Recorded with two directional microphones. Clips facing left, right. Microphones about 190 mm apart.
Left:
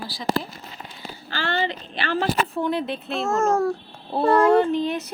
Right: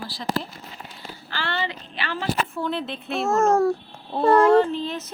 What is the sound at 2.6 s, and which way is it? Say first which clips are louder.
Speech: left 3 dB; 15° left (ahead or behind).